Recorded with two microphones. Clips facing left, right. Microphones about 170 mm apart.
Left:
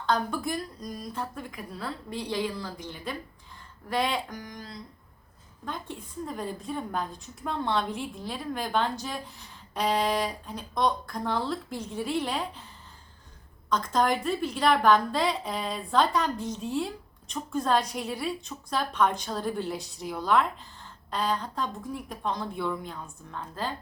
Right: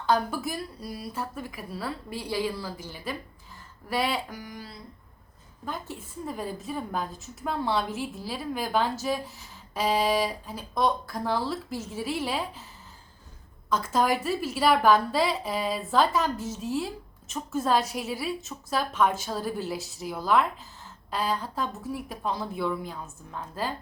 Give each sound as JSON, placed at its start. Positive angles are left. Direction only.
{"t": 0.0, "sound": "a woman's voice", "side_deg": -5}
{"t": 13.7, "sound": "a woman's voice", "side_deg": -5}